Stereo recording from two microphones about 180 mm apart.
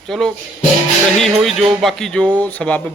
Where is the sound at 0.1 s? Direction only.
5° left (ahead or behind).